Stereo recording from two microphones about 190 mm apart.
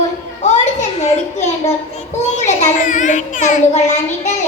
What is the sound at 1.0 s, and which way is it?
A child's voice, 35° left (ahead or behind).